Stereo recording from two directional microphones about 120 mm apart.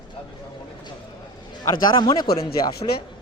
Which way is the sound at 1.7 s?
35° left (ahead or behind).